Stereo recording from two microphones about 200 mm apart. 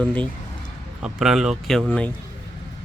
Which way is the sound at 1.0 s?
5° right (ahead or behind).